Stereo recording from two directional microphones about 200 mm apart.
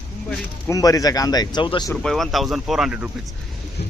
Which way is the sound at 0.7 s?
15° left (ahead or behind).